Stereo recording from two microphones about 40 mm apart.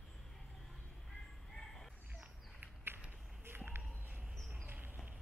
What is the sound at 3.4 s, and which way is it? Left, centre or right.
Walk, right.